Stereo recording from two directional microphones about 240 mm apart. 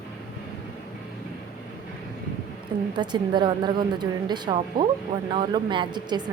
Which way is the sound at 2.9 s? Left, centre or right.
Centre.